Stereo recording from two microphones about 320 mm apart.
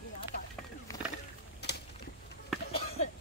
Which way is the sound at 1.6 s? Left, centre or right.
Left.